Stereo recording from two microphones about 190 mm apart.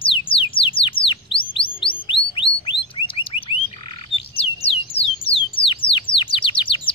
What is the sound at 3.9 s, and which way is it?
Frog, 30° left (ahead or behind).